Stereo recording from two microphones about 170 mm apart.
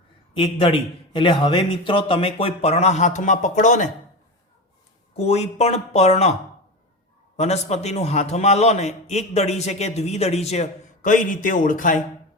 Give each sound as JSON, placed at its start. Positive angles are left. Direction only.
{"t": 0.3, "sound": "a man's voice", "side_deg": 30}
{"t": 5.1, "sound": "a man's voice", "side_deg": 40}
{"t": 7.3, "sound": "a man's voice", "side_deg": 40}